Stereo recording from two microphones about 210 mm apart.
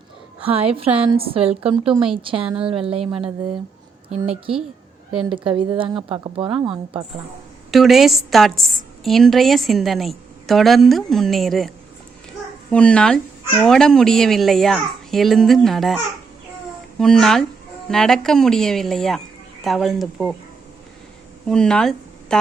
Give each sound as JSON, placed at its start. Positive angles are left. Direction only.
{"t": 0.4, "sound": "a woman's voice", "side_deg": -25}
{"t": 5.5, "sound": "a woman's voice", "side_deg": -25}
{"t": 7.7, "sound": "a woman's voice", "side_deg": 0}
{"t": 12.7, "sound": "a woman's voice", "side_deg": 5}
{"t": 17.0, "sound": "a woman's voice", "side_deg": 5}
{"t": 21.4, "sound": "speech", "side_deg": 5}